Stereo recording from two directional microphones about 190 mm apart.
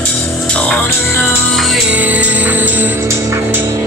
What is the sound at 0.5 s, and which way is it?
Music, 5° left (ahead or behind).